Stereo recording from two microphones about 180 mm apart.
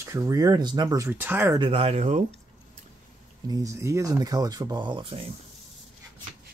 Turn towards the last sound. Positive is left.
turn(degrees=-30)  # may be behind; listen again after turning